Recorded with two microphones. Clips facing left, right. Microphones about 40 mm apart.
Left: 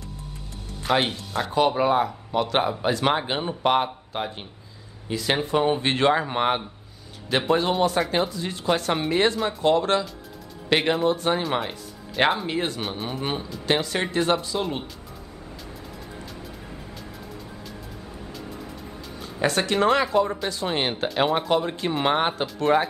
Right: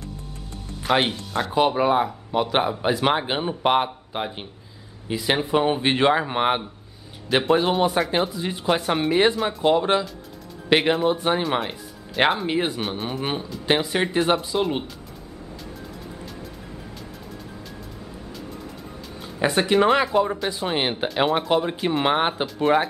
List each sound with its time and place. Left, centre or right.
0.8 s speech: centre
12.2 s speech: centre
12.4 s speech: centre
12.8 s speech: centre
19.2 s speech: centre